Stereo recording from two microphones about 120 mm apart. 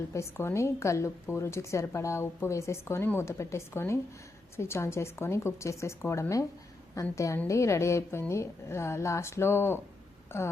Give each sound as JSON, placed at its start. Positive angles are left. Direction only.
{"t": 0.1, "sound": "a woman's voice", "side_deg": 25}